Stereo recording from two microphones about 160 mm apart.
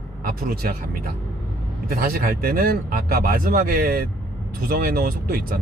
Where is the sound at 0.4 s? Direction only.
65° right (ahead or behind).